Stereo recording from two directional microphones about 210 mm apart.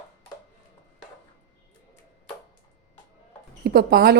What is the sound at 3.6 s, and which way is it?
Speech, 50° right (ahead or behind).